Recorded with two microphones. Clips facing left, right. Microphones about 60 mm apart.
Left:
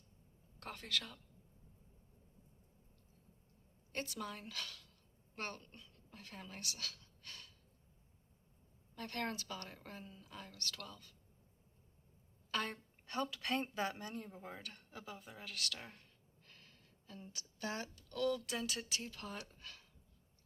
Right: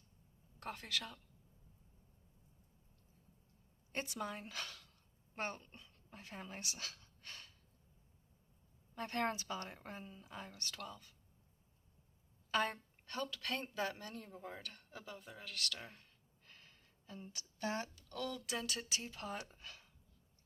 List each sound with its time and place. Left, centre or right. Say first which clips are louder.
0.6 s speech: even; centre
3.9 s a woman's voice: right 1 dB; centre
9.0 s a woman's voice: right 4 dB; right
12.5 s a sound: right 4 dB; centre
13.2 s speech: left 3 dB; centre
14.5 s speech: even; centre
16.5 s gasp: right 1 dB; centre
17.2 s speech: right 2 dB; right
18.4 s speech: even; centre
19.0 s speech: right 2 dB; centre